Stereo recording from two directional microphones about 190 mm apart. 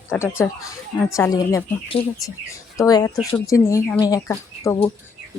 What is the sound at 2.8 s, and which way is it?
Speech, 15° left (ahead or behind).